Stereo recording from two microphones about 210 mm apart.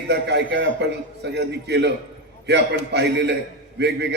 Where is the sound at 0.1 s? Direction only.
55° right (ahead or behind).